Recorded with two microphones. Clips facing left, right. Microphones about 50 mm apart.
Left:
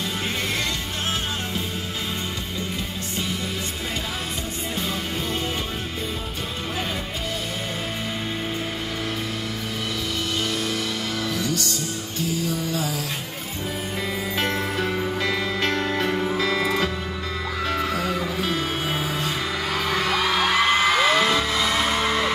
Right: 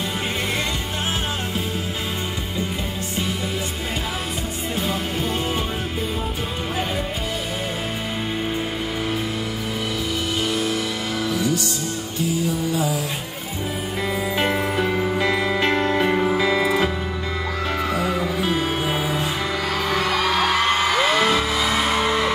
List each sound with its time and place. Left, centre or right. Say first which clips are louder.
10.4 s music: right 3 dB; centre
12.7 s music: right 4 dB; centre
14.3 s music: right 3 dB; centre